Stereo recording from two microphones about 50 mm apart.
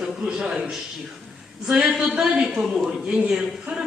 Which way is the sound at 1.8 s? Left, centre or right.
Centre.